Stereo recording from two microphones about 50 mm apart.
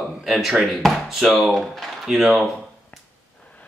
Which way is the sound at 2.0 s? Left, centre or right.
Centre.